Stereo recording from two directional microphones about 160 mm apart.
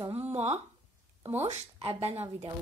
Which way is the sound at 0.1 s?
40° right (ahead or behind).